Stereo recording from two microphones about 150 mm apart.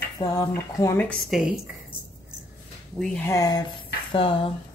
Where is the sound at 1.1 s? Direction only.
Centre (ahead or behind).